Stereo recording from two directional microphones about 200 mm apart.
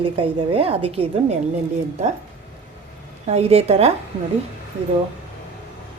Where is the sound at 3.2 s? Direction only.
30° right (ahead or behind).